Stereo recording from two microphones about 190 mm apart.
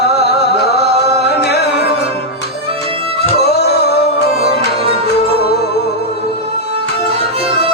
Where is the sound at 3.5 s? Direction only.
60° left (ahead or behind).